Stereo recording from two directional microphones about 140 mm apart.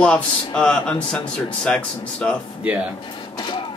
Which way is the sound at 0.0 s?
5° left (ahead or behind).